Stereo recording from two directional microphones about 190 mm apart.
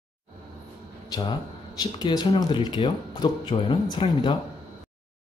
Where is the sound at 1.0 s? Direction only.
20° left (ahead or behind).